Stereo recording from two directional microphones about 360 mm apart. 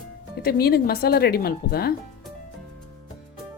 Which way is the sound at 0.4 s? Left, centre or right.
Left.